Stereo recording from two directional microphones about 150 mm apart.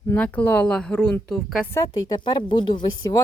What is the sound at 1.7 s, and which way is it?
A woman's voice, 25° left (ahead or behind).